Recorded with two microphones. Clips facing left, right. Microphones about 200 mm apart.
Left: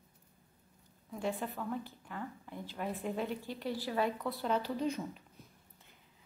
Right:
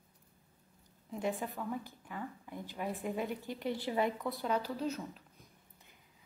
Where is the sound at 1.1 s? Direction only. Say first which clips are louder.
Right 1 dB; 15° right (ahead or behind).